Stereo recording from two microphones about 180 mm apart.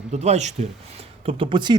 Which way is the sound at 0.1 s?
40° right (ahead or behind).